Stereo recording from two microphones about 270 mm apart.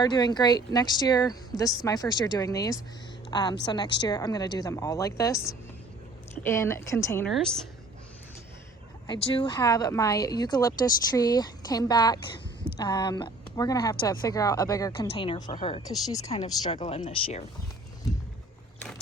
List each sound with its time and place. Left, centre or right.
0.0 s a woman's voice: centre
9.0 s speech: centre
16.3 s speech: left